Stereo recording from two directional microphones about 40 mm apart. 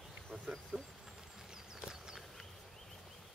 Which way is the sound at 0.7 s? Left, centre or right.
Centre.